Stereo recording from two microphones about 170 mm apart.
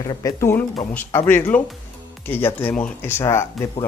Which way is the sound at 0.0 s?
20° left (ahead or behind).